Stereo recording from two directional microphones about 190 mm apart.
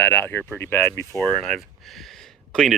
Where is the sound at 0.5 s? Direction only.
15° left (ahead or behind).